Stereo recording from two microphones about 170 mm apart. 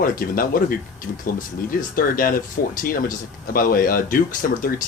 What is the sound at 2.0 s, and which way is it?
Speech, 55° left (ahead or behind).